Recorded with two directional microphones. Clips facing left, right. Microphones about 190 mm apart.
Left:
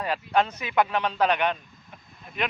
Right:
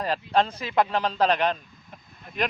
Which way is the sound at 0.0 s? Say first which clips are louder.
Right 1 dB; 35° right (ahead or behind).